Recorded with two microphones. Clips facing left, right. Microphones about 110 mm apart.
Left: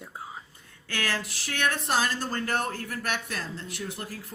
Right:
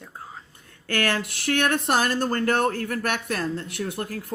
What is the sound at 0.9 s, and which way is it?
Speech, 55° right (ahead or behind).